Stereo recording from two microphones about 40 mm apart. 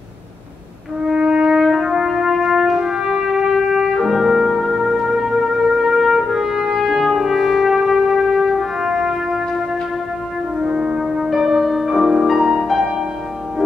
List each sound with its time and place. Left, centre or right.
1.0 s music: centre
1.6 s brass instrument: centre
10.6 s music: centre
11.0 s music: centre